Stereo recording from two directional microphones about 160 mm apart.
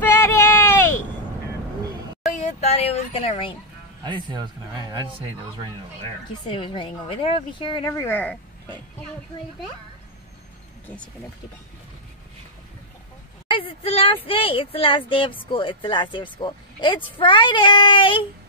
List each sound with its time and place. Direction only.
0.0 s a sound: 15° left (ahead or behind)
2.2 s a sound: 45° left (ahead or behind)
4.0 s speech: 30° right (ahead or behind)
6.5 s speech: 30° left (ahead or behind)
8.0 s speech: 10° left (ahead or behind)
13.5 s speech: 35° left (ahead or behind)